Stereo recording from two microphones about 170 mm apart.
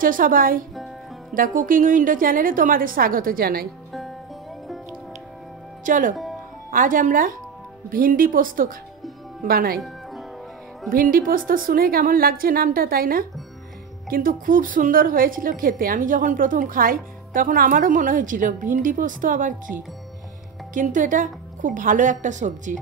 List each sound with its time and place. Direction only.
0.0 s a woman's voice: 55° right (ahead or behind)
5.9 s a woman's voice: 50° right (ahead or behind)
10.9 s a woman's voice: 55° right (ahead or behind)